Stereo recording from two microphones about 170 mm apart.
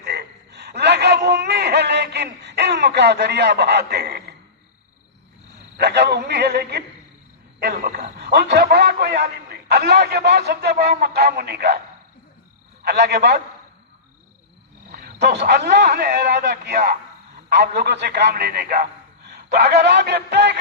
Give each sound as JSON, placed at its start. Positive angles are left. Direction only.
{"t": 0.0, "sound": "frog", "side_deg": -80}
{"t": 5.7, "sound": "a man's voice", "side_deg": -85}
{"t": 7.9, "sound": "a man's voice", "side_deg": -75}
{"t": 12.8, "sound": "a man's voice", "side_deg": -80}
{"t": 15.2, "sound": "a man's voice", "side_deg": -85}